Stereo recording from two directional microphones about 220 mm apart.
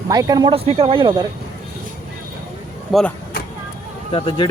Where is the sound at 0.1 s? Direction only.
15° right (ahead or behind).